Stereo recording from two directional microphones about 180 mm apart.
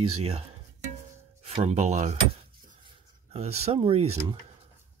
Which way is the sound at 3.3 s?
35° right (ahead or behind).